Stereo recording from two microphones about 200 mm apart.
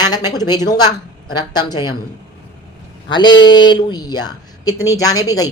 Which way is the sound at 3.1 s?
20° left (ahead or behind).